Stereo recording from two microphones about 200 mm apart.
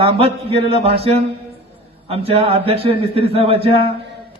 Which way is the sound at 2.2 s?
30° right (ahead or behind).